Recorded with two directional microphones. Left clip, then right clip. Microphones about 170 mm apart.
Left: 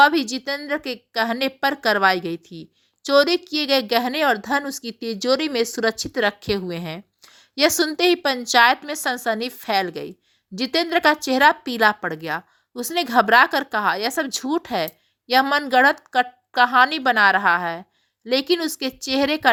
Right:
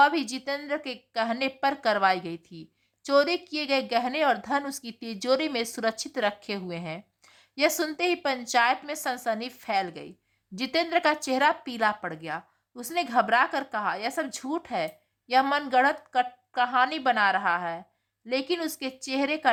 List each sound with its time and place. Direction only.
0.0 s a woman's voice: 20° left (ahead or behind)